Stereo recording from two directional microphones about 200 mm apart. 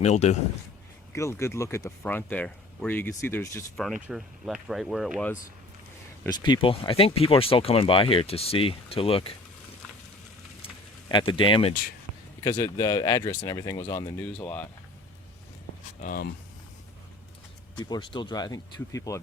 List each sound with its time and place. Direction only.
0.0 s a man's voice: 35° left (ahead or behind)
1.1 s speech: 15° left (ahead or behind)
3.8 s speech: centre (ahead or behind)
6.2 s speech: 20° left (ahead or behind)
11.1 s speech: 25° left (ahead or behind)
16.0 s speech: 45° left (ahead or behind)
17.7 s speech: 20° left (ahead or behind)